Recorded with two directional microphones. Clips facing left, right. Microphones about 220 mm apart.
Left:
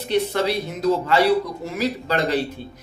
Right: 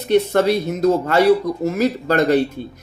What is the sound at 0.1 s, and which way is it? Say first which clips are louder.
Speech: right 6 dB; 50° right (ahead or behind).